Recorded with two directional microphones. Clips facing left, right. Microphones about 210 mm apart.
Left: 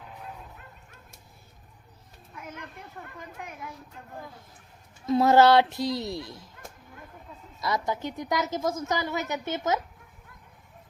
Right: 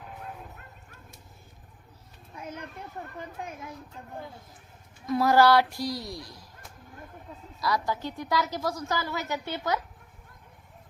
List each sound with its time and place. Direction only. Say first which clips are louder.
2.3 s a child's voice: right 3 dB; 30° right (ahead or behind)
5.0 s a woman's voice: left 2 dB; 25° left (ahead or behind)
7.6 s a woman's voice: even; 20° left (ahead or behind)